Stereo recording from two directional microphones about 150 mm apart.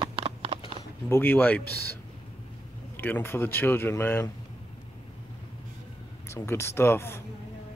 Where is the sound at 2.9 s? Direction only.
15° left (ahead or behind).